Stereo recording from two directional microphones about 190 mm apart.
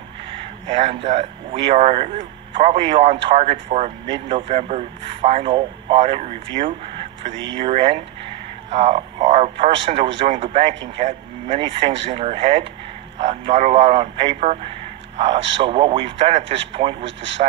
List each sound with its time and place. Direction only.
0.3 s speech: 30° right (ahead or behind)
4.3 s a man's voice: 25° right (ahead or behind)